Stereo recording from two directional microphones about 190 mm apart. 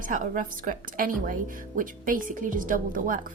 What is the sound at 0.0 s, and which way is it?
A woman's voice, 45° right (ahead or behind).